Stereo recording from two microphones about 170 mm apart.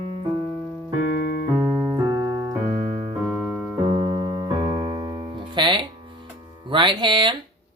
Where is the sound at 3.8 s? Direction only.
25° right (ahead or behind).